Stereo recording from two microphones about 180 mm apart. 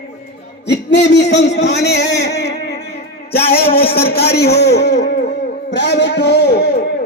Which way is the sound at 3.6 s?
30° left (ahead or behind).